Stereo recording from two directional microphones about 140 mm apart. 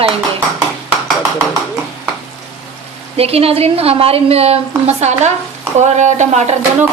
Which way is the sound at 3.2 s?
45° right (ahead or behind).